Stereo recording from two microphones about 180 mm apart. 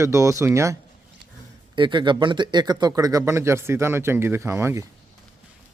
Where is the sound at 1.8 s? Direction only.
25° right (ahead or behind).